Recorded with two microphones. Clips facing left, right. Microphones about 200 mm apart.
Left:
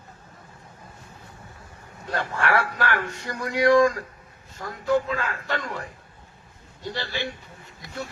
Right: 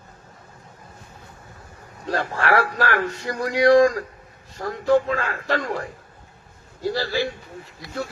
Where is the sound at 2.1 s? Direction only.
30° right (ahead or behind).